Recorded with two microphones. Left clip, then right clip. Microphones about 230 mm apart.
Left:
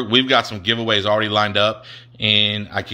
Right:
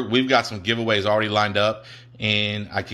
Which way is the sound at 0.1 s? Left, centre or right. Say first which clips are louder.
Left 4 dB; centre.